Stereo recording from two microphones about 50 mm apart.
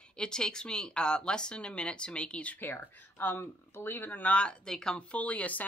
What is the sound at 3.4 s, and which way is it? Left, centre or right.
Speech, left.